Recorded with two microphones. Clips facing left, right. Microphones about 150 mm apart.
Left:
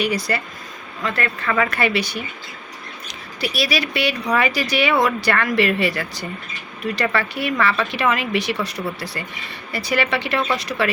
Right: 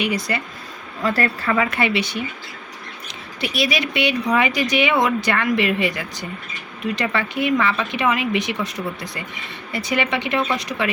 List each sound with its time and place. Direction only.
0.0 s speech: 20° right (ahead or behind)
1.0 s speech: 35° right (ahead or behind)
1.5 s speech: 20° right (ahead or behind)
3.4 s speech: 20° right (ahead or behind)